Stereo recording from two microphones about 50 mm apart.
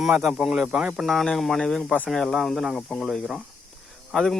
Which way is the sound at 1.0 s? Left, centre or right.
Centre.